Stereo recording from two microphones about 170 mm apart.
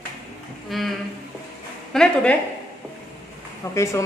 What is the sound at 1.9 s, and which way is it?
Speech, 5° left (ahead or behind).